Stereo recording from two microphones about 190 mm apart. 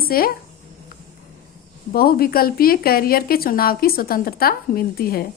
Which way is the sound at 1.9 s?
50° left (ahead or behind).